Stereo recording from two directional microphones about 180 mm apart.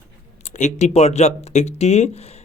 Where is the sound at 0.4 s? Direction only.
40° left (ahead or behind).